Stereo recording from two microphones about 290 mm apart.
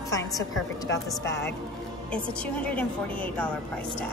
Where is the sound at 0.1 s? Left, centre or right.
Centre.